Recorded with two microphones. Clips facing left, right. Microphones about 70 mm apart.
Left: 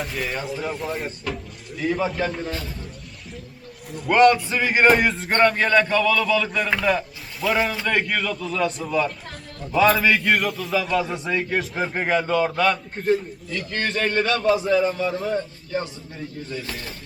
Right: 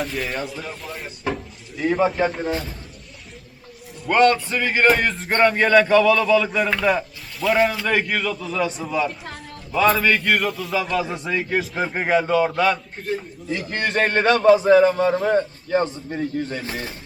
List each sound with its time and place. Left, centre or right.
0.0 s a man's voice: centre
2.0 s speech: centre
3.9 s a man's voice: centre
4.6 s music: centre
4.9 s a man's voice: centre
13.7 s a man's voice: right